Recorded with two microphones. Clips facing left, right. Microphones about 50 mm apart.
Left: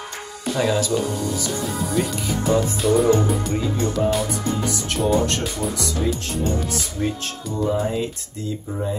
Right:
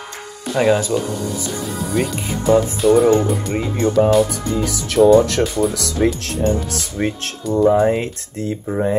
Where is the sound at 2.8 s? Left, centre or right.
Centre.